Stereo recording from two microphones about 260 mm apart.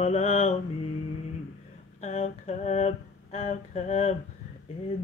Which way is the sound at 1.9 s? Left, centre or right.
Left.